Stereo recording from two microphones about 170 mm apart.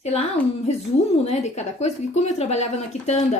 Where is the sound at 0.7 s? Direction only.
40° left (ahead or behind).